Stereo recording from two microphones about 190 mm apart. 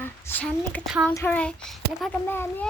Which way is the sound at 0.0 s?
10° left (ahead or behind).